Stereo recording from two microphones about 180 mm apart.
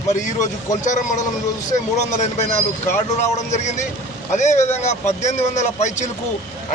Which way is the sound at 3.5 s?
40° left (ahead or behind).